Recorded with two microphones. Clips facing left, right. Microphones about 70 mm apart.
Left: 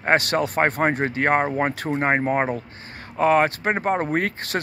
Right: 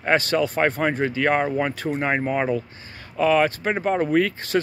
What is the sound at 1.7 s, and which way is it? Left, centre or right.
Speech, left.